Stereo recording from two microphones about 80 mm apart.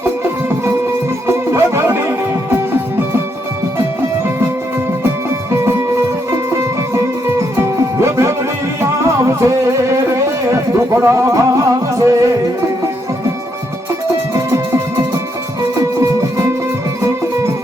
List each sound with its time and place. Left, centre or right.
1.3 s music: right
6.3 s music: right
14.3 s music: right